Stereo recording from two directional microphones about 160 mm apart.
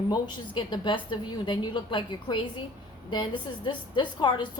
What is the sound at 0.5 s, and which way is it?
A woman's voice, 30° left (ahead or behind).